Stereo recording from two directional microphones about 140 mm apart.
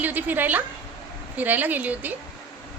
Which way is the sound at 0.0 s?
10° right (ahead or behind).